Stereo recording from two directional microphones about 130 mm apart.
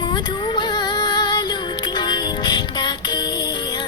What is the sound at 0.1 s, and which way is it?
Music, 35° left (ahead or behind).